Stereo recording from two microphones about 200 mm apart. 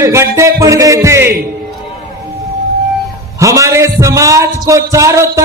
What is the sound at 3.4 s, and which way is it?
A man's voice, 15° right (ahead or behind).